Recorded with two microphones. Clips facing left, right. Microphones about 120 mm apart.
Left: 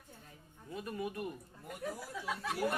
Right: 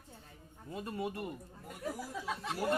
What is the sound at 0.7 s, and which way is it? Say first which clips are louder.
Speech: right 1 dB; 30° right (ahead or behind).